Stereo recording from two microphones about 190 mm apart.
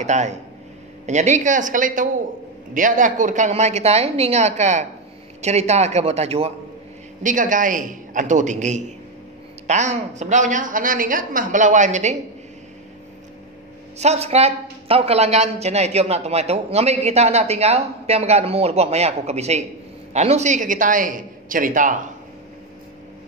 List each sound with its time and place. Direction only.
0.0 s a man's voice: 40° right (ahead or behind)
13.9 s a man's voice: 35° right (ahead or behind)